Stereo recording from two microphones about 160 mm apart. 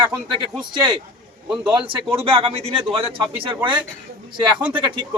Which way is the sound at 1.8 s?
35° right (ahead or behind).